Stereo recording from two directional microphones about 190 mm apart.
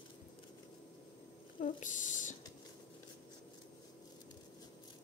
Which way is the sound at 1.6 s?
40° left (ahead or behind).